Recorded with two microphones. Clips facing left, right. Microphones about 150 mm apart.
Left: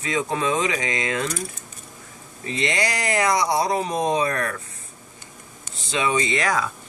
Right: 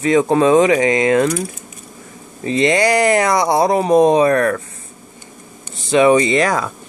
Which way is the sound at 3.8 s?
40° right (ahead or behind).